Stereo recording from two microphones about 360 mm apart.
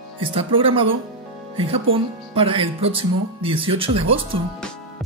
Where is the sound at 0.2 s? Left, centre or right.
Centre.